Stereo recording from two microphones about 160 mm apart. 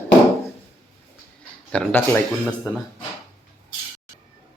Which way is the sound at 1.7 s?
10° left (ahead or behind).